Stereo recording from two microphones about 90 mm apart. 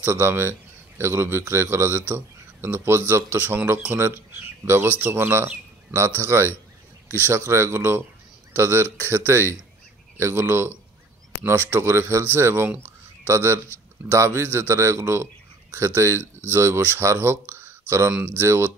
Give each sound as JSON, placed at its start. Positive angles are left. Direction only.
{"t": 0.0, "sound": "a man's voice", "side_deg": -25}
{"t": 11.7, "sound": "a man's voice", "side_deg": -25}